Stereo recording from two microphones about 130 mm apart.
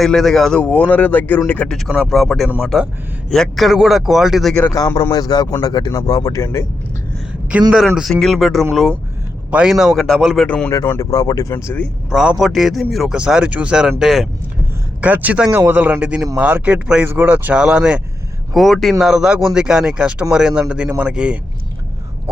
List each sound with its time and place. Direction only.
0.0 s speech: centre (ahead or behind)
1.9 s speech: centre (ahead or behind)
5.1 s speech: 30° left (ahead or behind)
7.7 s speech: 5° right (ahead or behind)
10.4 s speech: 10° left (ahead or behind)
10.7 s speech: 20° left (ahead or behind)
11.5 s speech: 15° left (ahead or behind)
12.1 s speech: 5° right (ahead or behind)
15.0 s speech: 10° right (ahead or behind)